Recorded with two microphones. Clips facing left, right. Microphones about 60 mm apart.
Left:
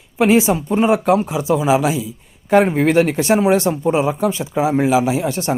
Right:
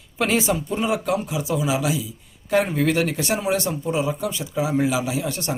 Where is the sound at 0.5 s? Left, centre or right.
Left.